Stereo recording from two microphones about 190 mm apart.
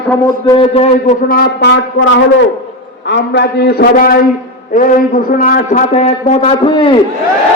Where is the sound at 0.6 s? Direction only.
35° left (ahead or behind).